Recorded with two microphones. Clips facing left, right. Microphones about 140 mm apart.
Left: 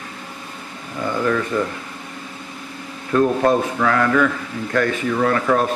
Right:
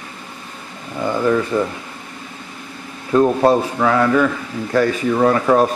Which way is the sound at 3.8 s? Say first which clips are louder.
Right 3 dB; 15° right (ahead or behind).